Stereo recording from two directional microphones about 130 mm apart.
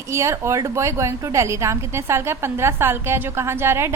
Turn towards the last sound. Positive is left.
turn(degrees=-20)  # may be behind; listen again after turning